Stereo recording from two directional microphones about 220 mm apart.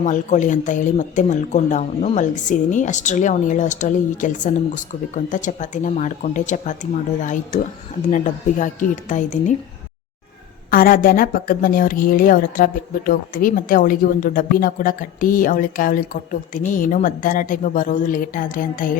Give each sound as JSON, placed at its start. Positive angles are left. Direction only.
{"t": 0.0, "sound": "a woman's voice", "side_deg": 35}
{"t": 10.7, "sound": "a woman's voice", "side_deg": 40}